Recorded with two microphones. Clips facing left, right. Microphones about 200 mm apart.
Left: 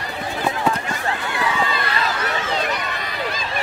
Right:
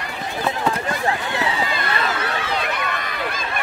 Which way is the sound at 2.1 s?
55° right (ahead or behind).